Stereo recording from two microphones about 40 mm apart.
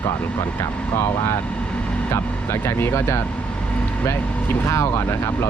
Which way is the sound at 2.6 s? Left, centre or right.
Left.